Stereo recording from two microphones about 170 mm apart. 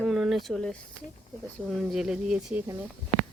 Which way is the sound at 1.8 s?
5° right (ahead or behind).